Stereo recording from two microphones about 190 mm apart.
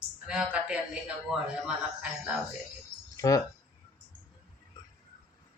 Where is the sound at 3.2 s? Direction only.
15° left (ahead or behind).